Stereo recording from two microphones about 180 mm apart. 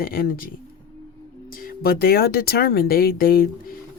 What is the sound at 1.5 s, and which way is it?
Speech, 55° left (ahead or behind).